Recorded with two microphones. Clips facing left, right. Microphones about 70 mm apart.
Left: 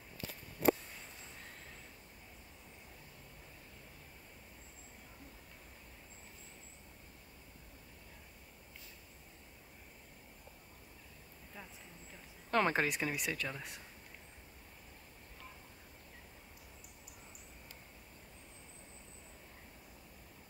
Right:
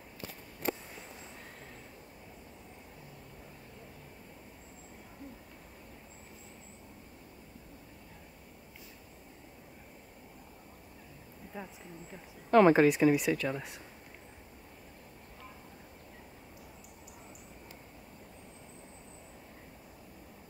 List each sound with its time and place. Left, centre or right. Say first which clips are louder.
11.5 s speech: right 8 dB; centre
12.4 s speech: right 10 dB; centre